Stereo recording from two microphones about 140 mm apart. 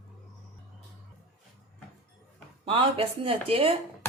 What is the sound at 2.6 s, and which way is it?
Speech, 40° right (ahead or behind).